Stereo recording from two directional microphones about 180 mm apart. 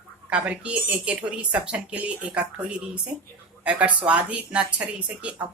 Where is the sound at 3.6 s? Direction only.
5° right (ahead or behind).